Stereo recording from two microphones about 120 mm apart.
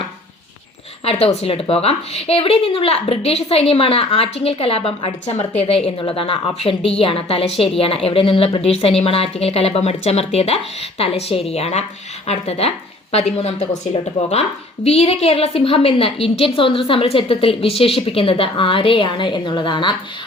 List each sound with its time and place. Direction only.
1.0 s a woman's voice: 60° left (ahead or behind); by 20.0 s 40° left (ahead or behind)